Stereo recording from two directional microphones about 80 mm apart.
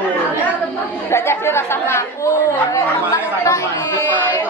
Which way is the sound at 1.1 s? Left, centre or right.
Left.